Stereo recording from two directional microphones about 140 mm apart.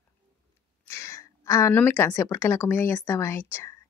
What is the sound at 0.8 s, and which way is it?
A woman's voice, 20° left (ahead or behind).